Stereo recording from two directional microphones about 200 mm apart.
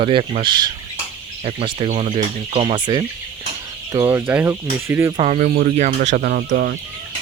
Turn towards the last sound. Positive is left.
turn(degrees=-45)  # may be behind; listen again after turning